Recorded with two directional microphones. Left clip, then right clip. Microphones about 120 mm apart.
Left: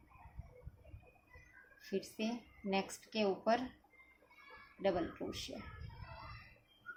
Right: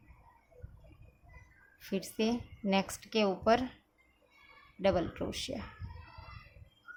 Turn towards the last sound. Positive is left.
turn(degrees=-65)  # may be behind; listen again after turning